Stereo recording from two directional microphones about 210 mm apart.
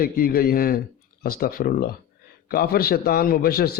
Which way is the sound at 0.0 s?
45° left (ahead or behind).